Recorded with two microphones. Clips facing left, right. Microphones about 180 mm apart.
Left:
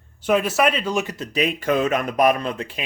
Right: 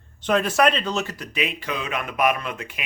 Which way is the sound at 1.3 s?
45° left (ahead or behind).